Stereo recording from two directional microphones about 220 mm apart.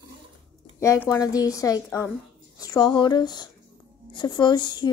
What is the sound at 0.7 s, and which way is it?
A woman's voice, 15° left (ahead or behind).